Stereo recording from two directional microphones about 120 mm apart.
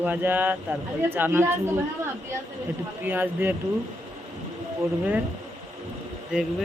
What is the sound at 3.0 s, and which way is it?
Speech, 15° right (ahead or behind).